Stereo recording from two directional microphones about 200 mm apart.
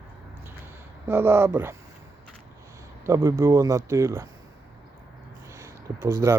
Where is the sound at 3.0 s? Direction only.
15° right (ahead or behind).